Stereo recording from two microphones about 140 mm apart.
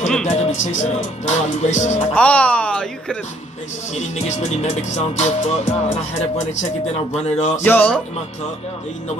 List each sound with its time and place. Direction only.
0.2 s music: 55° left (ahead or behind)
2.1 s speech: 10° left (ahead or behind)
4.0 s music: 55° left (ahead or behind)
7.3 s speech: 55° left (ahead or behind)
7.6 s speech: 10° left (ahead or behind)